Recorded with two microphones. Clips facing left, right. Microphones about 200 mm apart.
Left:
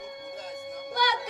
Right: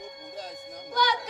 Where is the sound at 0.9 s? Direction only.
60° left (ahead or behind).